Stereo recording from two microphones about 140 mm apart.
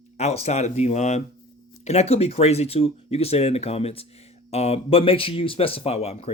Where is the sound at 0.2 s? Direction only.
50° left (ahead or behind).